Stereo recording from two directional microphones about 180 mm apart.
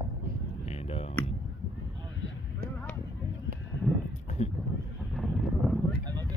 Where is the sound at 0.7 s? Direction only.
35° left (ahead or behind).